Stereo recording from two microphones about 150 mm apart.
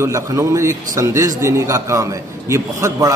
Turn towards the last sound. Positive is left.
turn(degrees=-20)  # may be behind; listen again after turning